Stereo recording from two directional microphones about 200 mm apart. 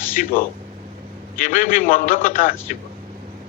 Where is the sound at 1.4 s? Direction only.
45° left (ahead or behind).